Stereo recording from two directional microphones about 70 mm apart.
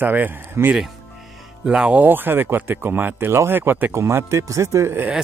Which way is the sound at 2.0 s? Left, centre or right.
Right.